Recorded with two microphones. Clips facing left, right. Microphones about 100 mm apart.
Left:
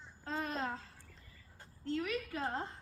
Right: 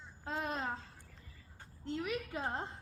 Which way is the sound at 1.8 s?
15° right (ahead or behind).